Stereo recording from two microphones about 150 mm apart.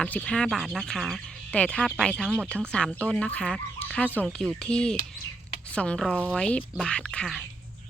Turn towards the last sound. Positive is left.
turn(degrees=5)  # may be behind; listen again after turning